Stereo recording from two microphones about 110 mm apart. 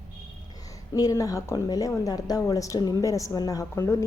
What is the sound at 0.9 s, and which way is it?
A woman's voice, 30° left (ahead or behind).